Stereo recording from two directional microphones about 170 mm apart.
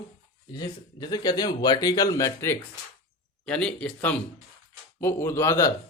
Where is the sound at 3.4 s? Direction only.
5° left (ahead or behind).